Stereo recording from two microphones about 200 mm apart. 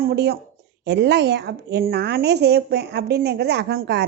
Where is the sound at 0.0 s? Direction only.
50° right (ahead or behind).